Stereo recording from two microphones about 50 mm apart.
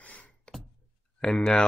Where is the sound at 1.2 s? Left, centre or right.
Centre.